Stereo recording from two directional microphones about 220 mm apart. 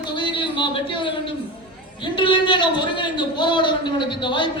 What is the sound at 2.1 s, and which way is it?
A man's voice, 20° left (ahead or behind).